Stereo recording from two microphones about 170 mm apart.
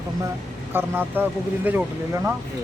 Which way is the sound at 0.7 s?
10° right (ahead or behind).